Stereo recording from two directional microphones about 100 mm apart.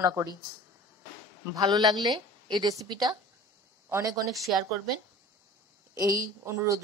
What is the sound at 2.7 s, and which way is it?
Speech, 40° right (ahead or behind).